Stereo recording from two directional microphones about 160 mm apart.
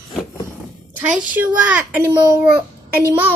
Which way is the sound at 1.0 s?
10° right (ahead or behind).